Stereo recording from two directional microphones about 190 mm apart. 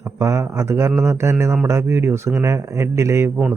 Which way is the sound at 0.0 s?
15° right (ahead or behind).